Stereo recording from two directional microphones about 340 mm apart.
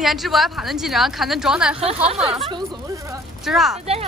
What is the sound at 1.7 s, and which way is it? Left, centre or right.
Speech, centre.